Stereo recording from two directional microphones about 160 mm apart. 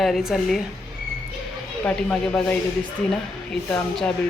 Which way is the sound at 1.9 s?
5° left (ahead or behind).